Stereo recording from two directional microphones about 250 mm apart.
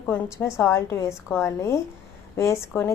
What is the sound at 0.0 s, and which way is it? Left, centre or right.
A woman's voice, centre.